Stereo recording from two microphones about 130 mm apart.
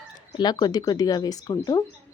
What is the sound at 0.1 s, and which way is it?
A woman's voice, 30° left (ahead or behind).